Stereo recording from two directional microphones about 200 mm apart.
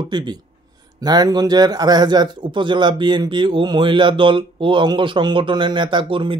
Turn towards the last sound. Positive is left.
turn(degrees=-25)  # may be behind; listen again after turning